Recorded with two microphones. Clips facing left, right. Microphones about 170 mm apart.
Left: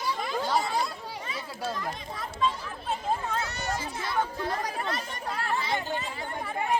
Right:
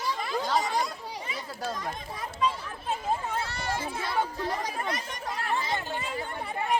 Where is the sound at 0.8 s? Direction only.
15° right (ahead or behind).